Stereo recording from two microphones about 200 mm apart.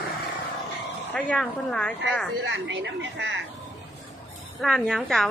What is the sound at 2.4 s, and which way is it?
Speech, 65° right (ahead or behind).